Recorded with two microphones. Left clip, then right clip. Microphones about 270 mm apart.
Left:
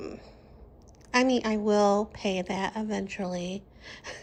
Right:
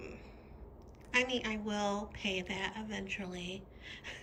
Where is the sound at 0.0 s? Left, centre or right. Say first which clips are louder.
Left 8 dB; left.